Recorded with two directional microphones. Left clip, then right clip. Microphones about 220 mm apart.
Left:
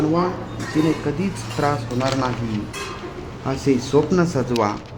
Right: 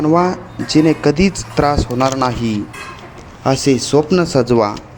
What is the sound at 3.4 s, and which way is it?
Speech, 25° right (ahead or behind).